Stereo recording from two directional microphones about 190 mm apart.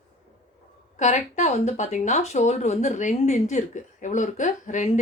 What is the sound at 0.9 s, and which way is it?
A woman's voice, 35° left (ahead or behind).